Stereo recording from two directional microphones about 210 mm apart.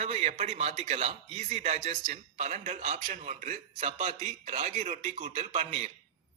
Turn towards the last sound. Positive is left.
turn(degrees=-30)  # may be behind; listen again after turning